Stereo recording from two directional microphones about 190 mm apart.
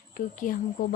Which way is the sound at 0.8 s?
45° left (ahead or behind).